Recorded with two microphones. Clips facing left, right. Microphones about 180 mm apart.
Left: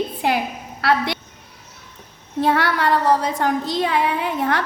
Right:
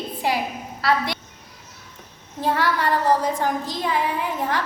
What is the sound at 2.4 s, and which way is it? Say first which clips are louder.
A woman's voice: left 3 dB; 70° left (ahead or behind).